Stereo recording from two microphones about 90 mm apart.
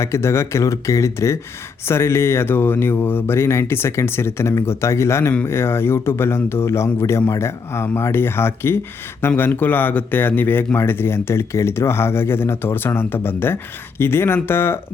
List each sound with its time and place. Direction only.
0.0 s speech: 30° left (ahead or behind)